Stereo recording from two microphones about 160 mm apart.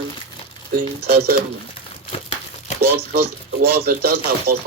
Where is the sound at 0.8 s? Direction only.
65° right (ahead or behind).